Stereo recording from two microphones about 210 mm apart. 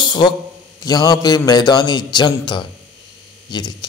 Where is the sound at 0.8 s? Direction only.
20° left (ahead or behind).